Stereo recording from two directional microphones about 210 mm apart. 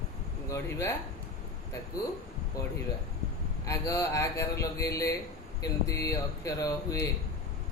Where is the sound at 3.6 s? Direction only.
15° left (ahead or behind).